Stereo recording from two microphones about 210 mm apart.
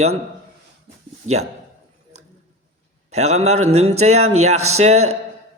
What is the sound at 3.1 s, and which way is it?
A man's voice, 30° right (ahead or behind).